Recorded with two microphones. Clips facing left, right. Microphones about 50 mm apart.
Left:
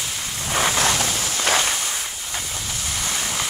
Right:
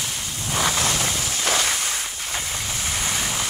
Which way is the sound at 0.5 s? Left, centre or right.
Centre.